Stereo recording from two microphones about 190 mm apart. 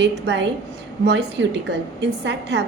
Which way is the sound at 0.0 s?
65° right (ahead or behind).